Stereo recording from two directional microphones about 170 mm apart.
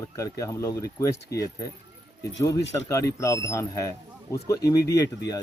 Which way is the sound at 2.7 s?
20° left (ahead or behind).